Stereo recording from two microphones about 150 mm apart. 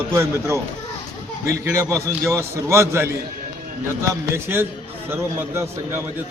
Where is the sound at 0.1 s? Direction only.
15° right (ahead or behind).